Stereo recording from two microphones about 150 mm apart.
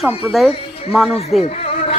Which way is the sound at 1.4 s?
45° left (ahead or behind).